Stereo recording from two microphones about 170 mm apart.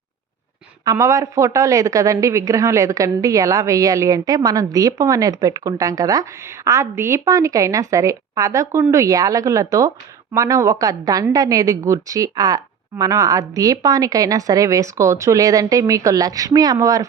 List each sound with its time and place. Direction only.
0.9 s speech: 20° right (ahead or behind)